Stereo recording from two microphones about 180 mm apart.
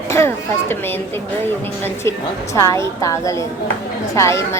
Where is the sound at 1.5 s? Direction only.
10° left (ahead or behind).